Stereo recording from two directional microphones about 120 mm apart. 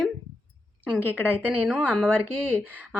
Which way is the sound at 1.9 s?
10° left (ahead or behind).